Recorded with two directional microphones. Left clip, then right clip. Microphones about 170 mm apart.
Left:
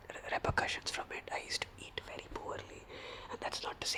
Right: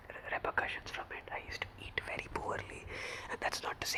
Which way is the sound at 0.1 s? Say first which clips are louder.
Left 1 dB; 20° left (ahead or behind).